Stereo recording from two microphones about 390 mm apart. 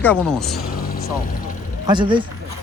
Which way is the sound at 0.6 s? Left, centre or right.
Left.